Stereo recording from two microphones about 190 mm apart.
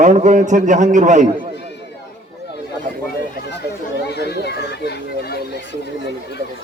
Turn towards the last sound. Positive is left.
turn(degrees=55)  # may be behind; listen again after turning